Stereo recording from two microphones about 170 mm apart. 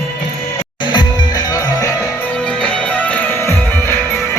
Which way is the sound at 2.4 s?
5° left (ahead or behind).